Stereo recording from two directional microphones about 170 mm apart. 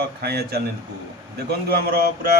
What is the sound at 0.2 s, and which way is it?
Speech, 70° right (ahead or behind).